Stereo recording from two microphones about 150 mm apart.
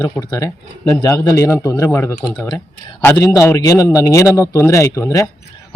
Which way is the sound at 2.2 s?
25° left (ahead or behind).